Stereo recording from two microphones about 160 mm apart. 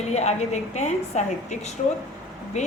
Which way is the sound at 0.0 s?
45° left (ahead or behind).